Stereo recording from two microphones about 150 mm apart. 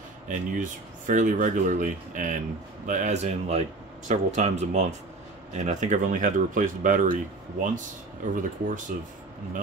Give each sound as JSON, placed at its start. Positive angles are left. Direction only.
{"t": 0.3, "sound": "a man's voice", "side_deg": -60}
{"t": 8.4, "sound": "speech", "side_deg": -60}